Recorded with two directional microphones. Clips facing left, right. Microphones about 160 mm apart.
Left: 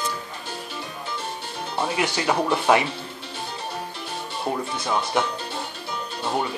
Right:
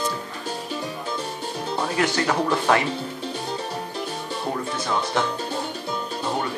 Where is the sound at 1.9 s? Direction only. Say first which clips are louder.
Right 1 dB; 15° left (ahead or behind).